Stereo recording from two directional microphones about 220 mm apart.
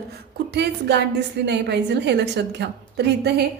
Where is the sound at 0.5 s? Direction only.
50° right (ahead or behind).